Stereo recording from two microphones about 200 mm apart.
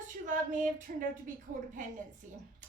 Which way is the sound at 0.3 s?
40° right (ahead or behind).